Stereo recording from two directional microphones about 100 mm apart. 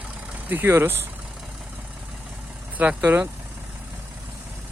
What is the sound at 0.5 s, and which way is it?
Speech, 20° right (ahead or behind).